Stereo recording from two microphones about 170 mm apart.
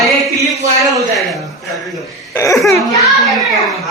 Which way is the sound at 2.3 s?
15° left (ahead or behind).